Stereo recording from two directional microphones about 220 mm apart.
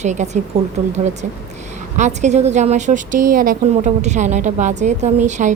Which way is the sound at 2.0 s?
30° right (ahead or behind).